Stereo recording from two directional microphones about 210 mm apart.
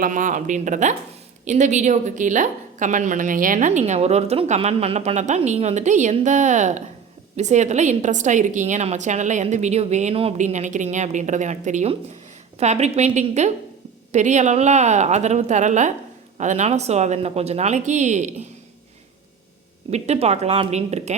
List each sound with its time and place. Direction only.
0.0 s a woman's voice: 35° right (ahead or behind)
19.9 s a woman's voice: 30° right (ahead or behind)